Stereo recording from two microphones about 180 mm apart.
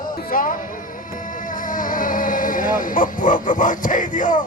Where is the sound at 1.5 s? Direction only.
50° left (ahead or behind).